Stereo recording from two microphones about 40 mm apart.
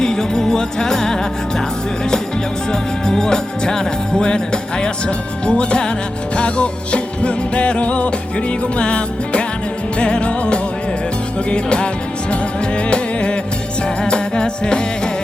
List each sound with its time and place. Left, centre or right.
0.0 s music: centre
2.7 s music: centre